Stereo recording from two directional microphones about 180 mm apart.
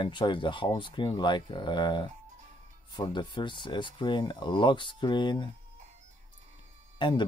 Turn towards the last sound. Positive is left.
turn(degrees=25)  # may be behind; listen again after turning